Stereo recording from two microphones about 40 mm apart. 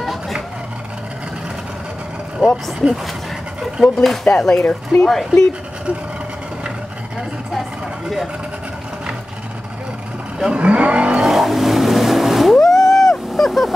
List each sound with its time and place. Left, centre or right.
0.0 s vehicle: centre
2.4 s speech: centre
3.8 s speech: centre
4.2 s speech: centre
5.0 s speech: centre
10.4 s speech: right
11.1 s vehicle: centre
12.6 s a sound: centre